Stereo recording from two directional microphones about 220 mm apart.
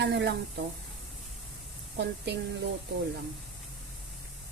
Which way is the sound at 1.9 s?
50° right (ahead or behind).